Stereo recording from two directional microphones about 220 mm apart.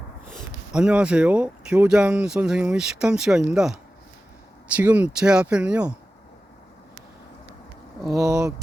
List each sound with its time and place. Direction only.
0.7 s speech: 5° right (ahead or behind)
4.8 s speech: 5° right (ahead or behind)
8.1 s speech: 15° right (ahead or behind)